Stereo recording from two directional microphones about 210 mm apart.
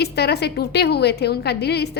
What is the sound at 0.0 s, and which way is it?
A woman's voice, 50° left (ahead or behind).